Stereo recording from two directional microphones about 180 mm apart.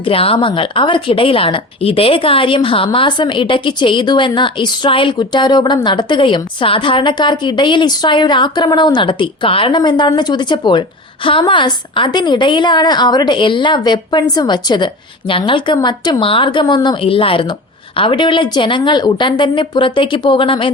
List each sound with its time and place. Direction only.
0.0 s a woman's voice: 30° left (ahead or behind)